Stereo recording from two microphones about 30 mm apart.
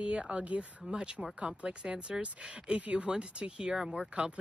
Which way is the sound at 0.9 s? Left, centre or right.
Right.